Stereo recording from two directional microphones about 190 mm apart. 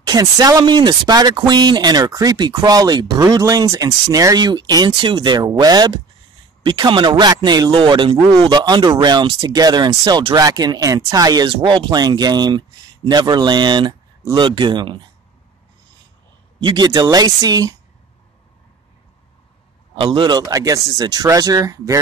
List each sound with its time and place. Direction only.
0.0 s speech: 20° right (ahead or behind)
16.5 s speech: 25° right (ahead or behind)
20.0 s speech: 25° right (ahead or behind)